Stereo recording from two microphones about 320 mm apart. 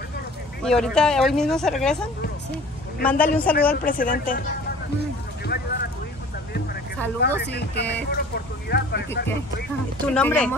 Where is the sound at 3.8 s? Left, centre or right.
Left.